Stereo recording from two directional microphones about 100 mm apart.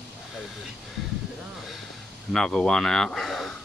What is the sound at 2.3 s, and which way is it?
Speech, 5° left (ahead or behind).